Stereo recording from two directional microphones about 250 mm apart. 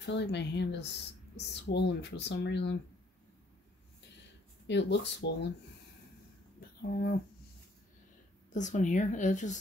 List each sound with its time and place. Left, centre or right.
0.0 s speech: left
4.6 s speech: left
6.8 s speech: left
8.5 s speech: left